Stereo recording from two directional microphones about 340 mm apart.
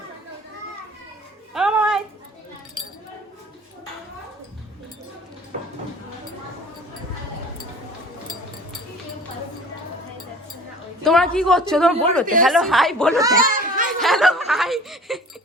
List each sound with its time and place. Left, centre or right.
1.5 s a sound: centre
11.0 s a woman's voice: centre
13.4 s laughter: right
14.0 s snicker: centre